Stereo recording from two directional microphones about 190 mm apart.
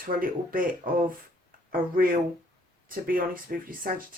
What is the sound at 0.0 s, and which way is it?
Speech, 45° right (ahead or behind).